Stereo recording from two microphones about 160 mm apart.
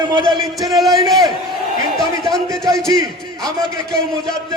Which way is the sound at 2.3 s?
Centre (ahead or behind).